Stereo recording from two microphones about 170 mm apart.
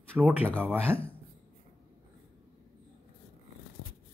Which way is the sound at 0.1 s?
5° right (ahead or behind).